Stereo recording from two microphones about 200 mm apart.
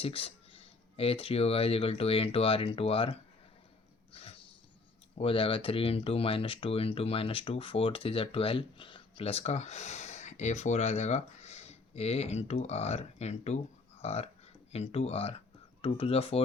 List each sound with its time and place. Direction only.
0.0 s speech: 30° left (ahead or behind)
4.1 s a sound: 30° left (ahead or behind)
5.1 s speech: 30° left (ahead or behind)